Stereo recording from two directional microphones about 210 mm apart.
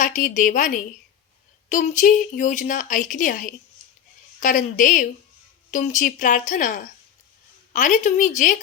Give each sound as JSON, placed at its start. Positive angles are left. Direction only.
{"t": 0.0, "sound": "a woman's voice", "side_deg": 35}